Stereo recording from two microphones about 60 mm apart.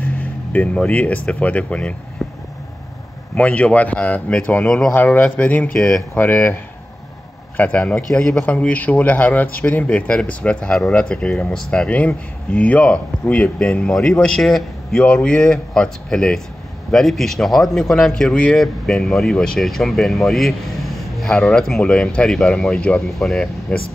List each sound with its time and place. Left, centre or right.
0.0 s a sound: left
0.9 s a man's voice: left
2.2 s a sound: centre
3.3 s a man's voice: left
4.6 s speech: centre
4.9 s speech: left
5.8 s speech: centre
6.1 s speech: left
7.8 s a man's voice: centre